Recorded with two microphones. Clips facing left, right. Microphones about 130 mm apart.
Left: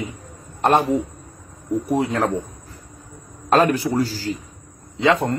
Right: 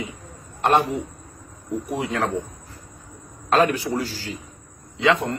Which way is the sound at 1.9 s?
40° left (ahead or behind).